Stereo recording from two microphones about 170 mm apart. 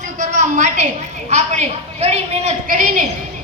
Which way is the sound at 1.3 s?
40° right (ahead or behind).